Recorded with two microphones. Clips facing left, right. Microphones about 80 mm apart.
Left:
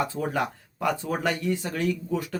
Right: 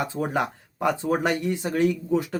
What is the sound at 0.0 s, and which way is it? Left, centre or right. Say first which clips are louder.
Speech: right 1 dB; right.